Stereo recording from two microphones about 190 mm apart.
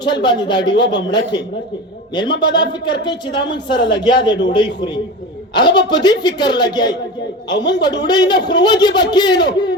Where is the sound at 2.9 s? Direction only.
25° left (ahead or behind).